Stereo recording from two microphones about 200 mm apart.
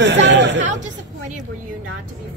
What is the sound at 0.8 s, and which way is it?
Speech, 40° right (ahead or behind).